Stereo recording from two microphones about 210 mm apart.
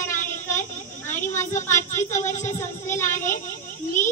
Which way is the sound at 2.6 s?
10° left (ahead or behind).